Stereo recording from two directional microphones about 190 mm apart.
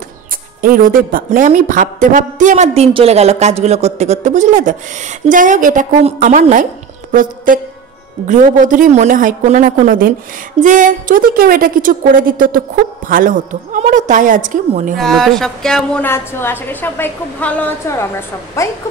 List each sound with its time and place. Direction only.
0.6 s a woman's voice: 45° right (ahead or behind)
15.0 s a woman's voice: centre (ahead or behind); by 18.7 s 15° left (ahead or behind)